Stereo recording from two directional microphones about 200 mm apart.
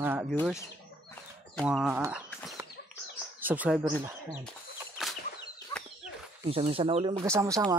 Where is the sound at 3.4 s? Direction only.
10° right (ahead or behind).